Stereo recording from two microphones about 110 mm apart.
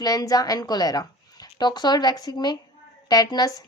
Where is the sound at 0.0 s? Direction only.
35° left (ahead or behind).